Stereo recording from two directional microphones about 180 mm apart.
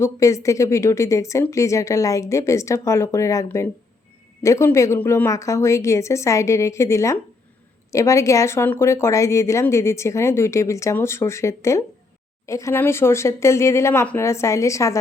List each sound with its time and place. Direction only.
0.0 s speech: 15° left (ahead or behind)